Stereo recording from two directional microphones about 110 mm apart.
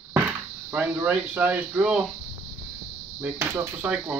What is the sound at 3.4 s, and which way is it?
Speech, 25° right (ahead or behind).